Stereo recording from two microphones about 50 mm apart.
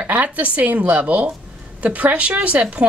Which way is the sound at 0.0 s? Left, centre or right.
Right.